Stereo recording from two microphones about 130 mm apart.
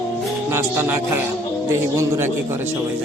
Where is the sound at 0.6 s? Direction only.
20° right (ahead or behind).